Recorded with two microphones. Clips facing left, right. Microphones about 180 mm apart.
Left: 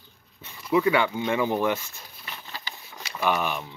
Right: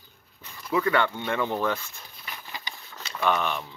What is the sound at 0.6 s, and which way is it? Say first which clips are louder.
Speech: left 2 dB; 10° left (ahead or behind).